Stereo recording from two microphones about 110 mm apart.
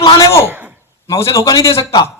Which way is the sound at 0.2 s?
25° left (ahead or behind).